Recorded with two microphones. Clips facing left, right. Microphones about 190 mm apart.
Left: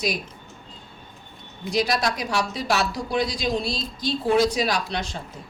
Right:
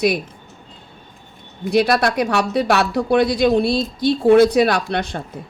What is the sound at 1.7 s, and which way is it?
A woman's voice, 60° right (ahead or behind).